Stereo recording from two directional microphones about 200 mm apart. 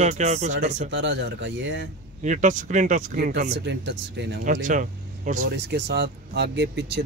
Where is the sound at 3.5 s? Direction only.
60° right (ahead or behind).